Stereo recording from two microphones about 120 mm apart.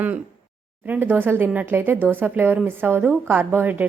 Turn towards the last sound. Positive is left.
turn(degrees=-15)  # may be behind; listen again after turning